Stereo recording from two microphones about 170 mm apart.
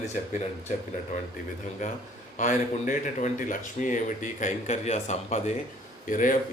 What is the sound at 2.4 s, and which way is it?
A man's voice, 45° left (ahead or behind).